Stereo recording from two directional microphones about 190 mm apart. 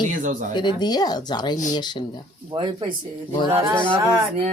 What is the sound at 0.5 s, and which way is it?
Speech, 20° left (ahead or behind).